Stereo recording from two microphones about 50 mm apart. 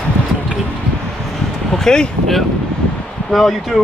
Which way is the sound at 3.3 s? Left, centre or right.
Centre.